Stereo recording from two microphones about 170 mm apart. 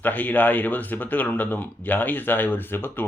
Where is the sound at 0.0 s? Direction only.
10° left (ahead or behind).